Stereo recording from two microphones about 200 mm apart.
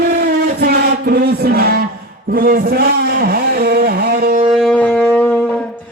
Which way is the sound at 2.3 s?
45° right (ahead or behind).